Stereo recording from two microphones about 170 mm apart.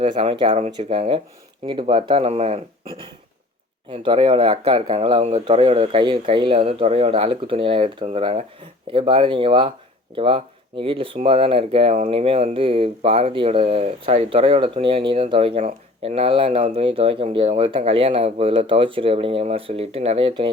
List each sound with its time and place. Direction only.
0.0 s speech: 30° right (ahead or behind)
3.9 s speech: 30° right (ahead or behind)